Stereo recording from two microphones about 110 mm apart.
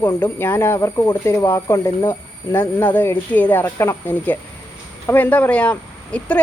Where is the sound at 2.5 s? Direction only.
15° left (ahead or behind).